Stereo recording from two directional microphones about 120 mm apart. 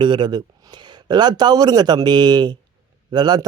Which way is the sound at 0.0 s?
40° right (ahead or behind).